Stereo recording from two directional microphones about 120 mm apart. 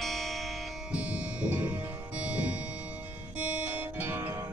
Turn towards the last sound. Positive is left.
turn(degrees=-20)  # may be behind; listen again after turning